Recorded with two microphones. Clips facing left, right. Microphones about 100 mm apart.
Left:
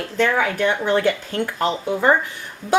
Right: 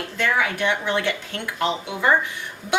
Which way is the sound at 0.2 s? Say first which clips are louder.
Left 4 dB; 40° left (ahead or behind).